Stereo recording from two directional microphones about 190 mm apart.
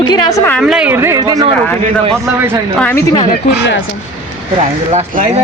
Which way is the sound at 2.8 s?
10° left (ahead or behind).